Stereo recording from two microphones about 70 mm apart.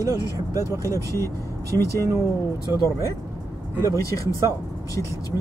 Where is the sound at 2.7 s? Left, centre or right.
Right.